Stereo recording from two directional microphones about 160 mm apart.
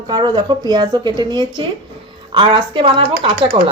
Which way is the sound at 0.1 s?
25° right (ahead or behind).